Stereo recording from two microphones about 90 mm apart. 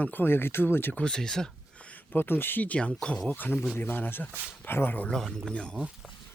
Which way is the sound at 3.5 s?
5° right (ahead or behind).